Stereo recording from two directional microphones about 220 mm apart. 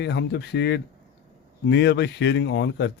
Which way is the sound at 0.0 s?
50° left (ahead or behind).